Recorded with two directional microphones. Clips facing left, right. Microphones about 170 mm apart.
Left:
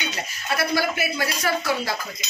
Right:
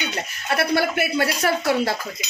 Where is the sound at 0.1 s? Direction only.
60° right (ahead or behind).